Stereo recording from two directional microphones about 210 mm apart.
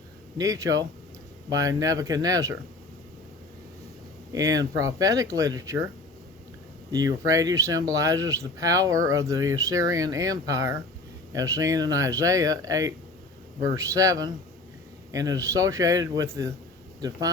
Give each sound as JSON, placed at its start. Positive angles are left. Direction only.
{"t": 0.3, "sound": "speech", "side_deg": -15}
{"t": 4.3, "sound": "speech", "side_deg": -15}
{"t": 6.9, "sound": "speech", "side_deg": -15}